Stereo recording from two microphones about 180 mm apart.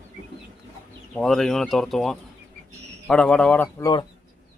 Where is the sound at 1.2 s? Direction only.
Centre (ahead or behind).